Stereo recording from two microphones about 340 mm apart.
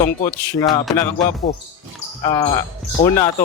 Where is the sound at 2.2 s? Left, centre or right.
Centre.